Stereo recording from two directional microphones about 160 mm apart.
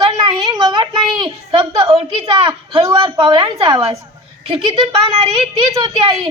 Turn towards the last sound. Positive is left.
turn(degrees=-25)  # may be behind; listen again after turning